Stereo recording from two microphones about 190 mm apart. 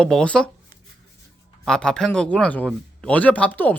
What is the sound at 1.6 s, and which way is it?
Speech, 5° left (ahead or behind).